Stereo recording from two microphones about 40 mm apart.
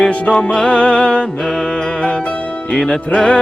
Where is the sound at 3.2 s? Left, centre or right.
Centre.